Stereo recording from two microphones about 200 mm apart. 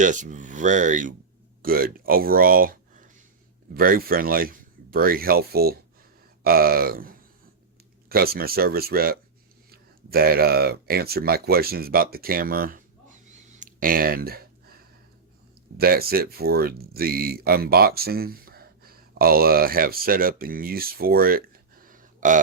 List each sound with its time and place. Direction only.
0.0 s speech: 40° right (ahead or behind)
15.8 s speech: 50° right (ahead or behind)